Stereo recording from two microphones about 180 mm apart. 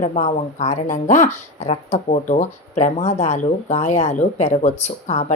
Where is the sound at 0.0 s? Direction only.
40° left (ahead or behind).